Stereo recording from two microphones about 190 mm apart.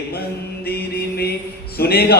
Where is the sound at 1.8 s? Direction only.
55° left (ahead or behind).